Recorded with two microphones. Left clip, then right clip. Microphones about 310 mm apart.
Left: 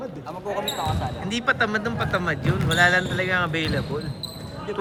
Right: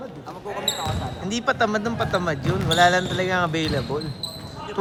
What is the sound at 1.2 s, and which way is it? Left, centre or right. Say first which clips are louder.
A man's voice: right 1 dB; centre.